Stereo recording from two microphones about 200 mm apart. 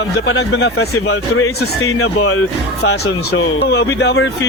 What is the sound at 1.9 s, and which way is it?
Speech, 90° left.